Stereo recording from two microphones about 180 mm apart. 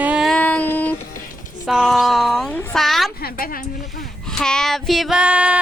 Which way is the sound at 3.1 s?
55° left (ahead or behind).